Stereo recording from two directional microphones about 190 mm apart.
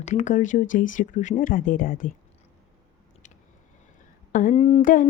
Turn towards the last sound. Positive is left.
turn(degrees=30)  # may be behind; listen again after turning